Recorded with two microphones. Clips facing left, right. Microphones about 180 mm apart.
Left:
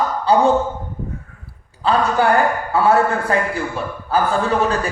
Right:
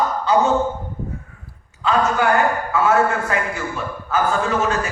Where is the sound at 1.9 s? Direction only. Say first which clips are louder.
Left 2 dB; 35° left (ahead or behind).